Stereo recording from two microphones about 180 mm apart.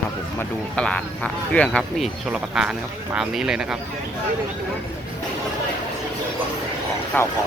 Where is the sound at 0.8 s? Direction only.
5° left (ahead or behind).